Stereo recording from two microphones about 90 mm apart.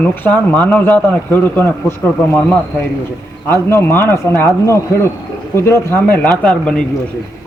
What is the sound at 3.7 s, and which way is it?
Speech, 25° left (ahead or behind).